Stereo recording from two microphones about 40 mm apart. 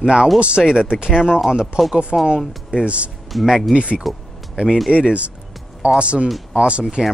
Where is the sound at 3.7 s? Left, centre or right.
Right.